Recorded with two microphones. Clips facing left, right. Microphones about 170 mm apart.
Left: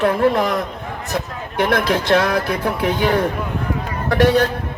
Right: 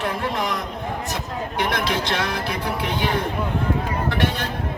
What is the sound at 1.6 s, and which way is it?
Speech, 55° left (ahead or behind).